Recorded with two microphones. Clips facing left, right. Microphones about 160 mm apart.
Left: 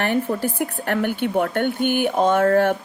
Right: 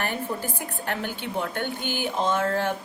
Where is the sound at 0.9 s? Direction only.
55° left (ahead or behind).